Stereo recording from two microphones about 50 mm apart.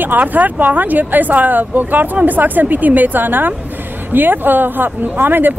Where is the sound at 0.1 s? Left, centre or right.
Right.